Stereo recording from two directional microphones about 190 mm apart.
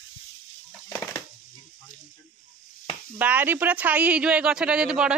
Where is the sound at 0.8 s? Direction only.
15° left (ahead or behind).